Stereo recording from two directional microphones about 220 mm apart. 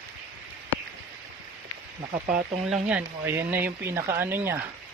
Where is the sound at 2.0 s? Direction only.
25° right (ahead or behind).